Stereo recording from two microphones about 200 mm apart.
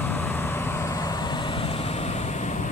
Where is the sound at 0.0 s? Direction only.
10° left (ahead or behind).